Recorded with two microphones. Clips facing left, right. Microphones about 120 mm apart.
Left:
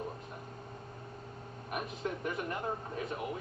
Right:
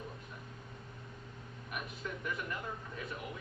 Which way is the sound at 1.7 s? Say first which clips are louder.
Left 6 dB; 40° left (ahead or behind).